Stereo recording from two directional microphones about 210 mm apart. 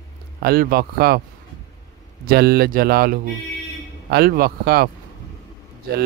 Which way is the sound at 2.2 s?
50° right (ahead or behind).